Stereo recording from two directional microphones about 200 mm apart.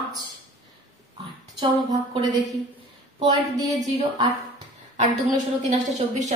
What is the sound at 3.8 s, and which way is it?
Speech, 30° right (ahead or behind).